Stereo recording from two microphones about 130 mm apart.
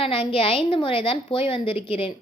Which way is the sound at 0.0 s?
45° left (ahead or behind).